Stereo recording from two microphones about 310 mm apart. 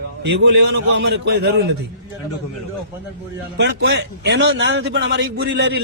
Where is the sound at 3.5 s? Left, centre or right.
Right.